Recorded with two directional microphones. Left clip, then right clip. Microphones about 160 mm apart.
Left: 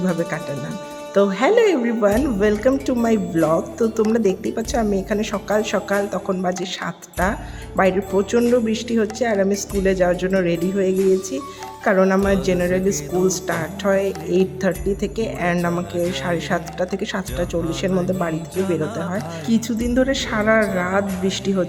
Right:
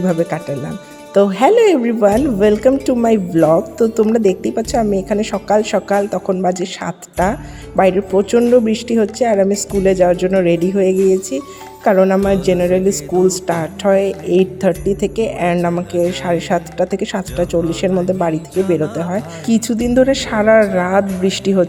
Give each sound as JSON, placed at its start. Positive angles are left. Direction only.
{"t": 0.0, "sound": "a woman's voice", "side_deg": -30}